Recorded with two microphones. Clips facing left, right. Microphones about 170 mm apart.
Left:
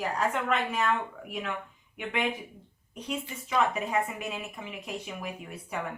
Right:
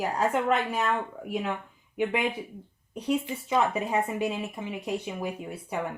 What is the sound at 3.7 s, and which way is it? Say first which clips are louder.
Speech: right 3 dB; 30° right (ahead or behind).